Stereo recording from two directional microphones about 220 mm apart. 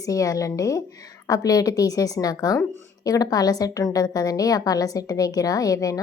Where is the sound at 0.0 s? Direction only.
15° left (ahead or behind).